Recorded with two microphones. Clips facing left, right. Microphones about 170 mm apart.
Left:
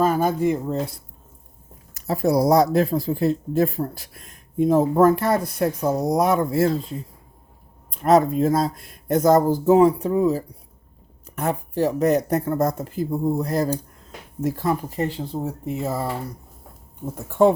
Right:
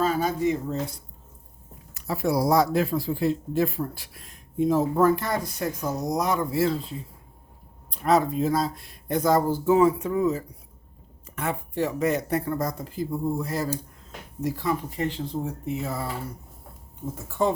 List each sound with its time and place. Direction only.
0.0 s speech: 50° left (ahead or behind)
1.9 s speech: 40° left (ahead or behind)
8.0 s speech: 45° left (ahead or behind)
17.4 s speech: 60° left (ahead or behind)